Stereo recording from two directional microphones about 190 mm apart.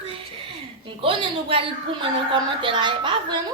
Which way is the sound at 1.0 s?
30° right (ahead or behind).